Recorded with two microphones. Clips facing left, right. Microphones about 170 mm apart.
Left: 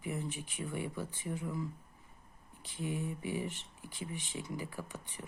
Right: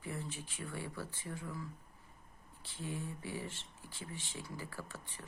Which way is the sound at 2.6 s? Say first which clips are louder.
Left 5 dB; 15° left (ahead or behind).